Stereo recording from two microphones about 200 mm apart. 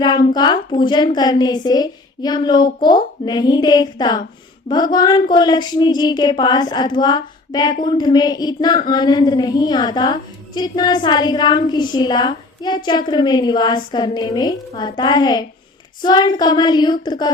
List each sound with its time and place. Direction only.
0.0 s a woman's voice: 20° left (ahead or behind)